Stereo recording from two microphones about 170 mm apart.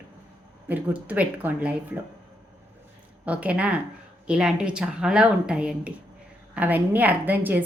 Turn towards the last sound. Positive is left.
turn(degrees=-10)  # may be behind; listen again after turning